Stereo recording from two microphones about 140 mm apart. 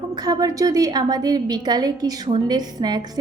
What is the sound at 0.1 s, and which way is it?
A woman's voice, 30° right (ahead or behind).